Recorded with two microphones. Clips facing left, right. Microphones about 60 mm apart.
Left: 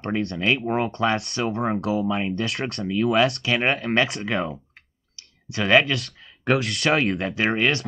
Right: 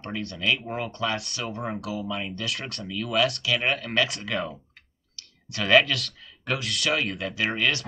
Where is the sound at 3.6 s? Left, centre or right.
Left.